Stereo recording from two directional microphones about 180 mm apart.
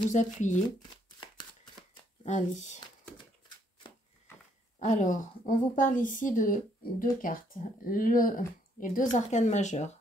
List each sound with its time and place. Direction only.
0.1 s a woman's voice: 40° left (ahead or behind)
1.2 s shuffling cards: 25° left (ahead or behind)
2.2 s speech: 40° left (ahead or behind)
4.7 s a woman's voice: 40° left (ahead or behind)